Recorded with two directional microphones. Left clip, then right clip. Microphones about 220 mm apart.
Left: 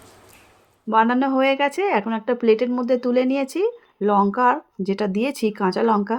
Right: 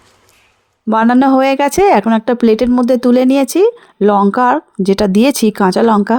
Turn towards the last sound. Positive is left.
turn(degrees=-40)  # may be behind; listen again after turning